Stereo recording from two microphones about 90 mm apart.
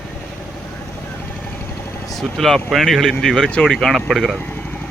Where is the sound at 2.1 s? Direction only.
Centre (ahead or behind).